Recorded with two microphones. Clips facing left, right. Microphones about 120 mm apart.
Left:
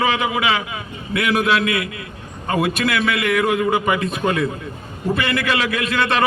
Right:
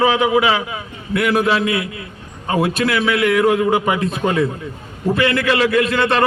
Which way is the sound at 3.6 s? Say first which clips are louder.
Right 2 dB; 5° right (ahead or behind).